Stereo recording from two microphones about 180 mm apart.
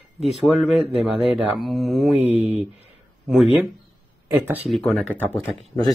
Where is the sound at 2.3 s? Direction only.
35° right (ahead or behind).